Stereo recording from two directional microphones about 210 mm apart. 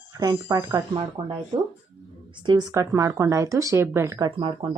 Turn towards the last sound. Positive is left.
turn(degrees=-25)  # may be behind; listen again after turning